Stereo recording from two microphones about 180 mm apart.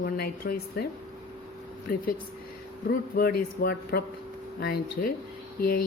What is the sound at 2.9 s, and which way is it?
A man's voice, 55° left (ahead or behind).